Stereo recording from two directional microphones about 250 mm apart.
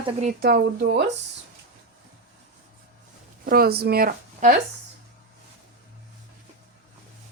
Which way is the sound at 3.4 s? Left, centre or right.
Right.